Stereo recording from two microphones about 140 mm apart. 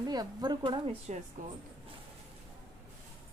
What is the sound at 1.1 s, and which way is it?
Speech, 60° right (ahead or behind).